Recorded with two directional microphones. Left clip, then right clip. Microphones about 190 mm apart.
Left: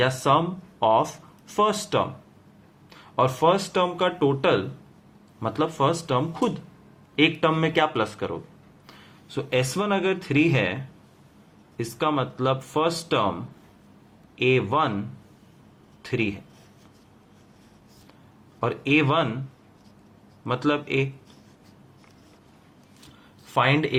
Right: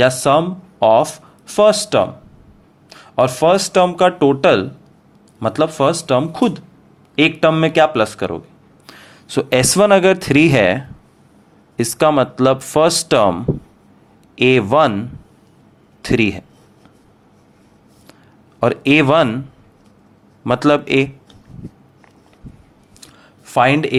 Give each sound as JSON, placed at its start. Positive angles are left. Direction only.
{"t": 0.0, "sound": "speech", "side_deg": -35}
{"t": 18.6, "sound": "speech", "side_deg": -45}
{"t": 20.4, "sound": "speech", "side_deg": -45}
{"t": 23.6, "sound": "speech", "side_deg": -40}